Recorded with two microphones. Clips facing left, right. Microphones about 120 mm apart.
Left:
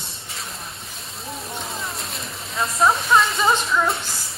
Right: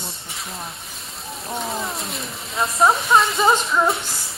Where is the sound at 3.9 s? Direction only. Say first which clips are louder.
Right 2 dB; centre (ahead or behind).